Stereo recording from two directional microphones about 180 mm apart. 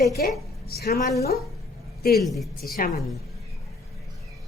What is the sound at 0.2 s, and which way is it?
Speech, 60° left (ahead or behind).